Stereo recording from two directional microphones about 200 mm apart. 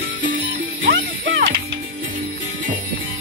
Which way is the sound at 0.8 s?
65° right (ahead or behind).